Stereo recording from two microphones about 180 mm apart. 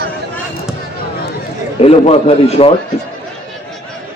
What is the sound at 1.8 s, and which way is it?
Speech, 35° left (ahead or behind).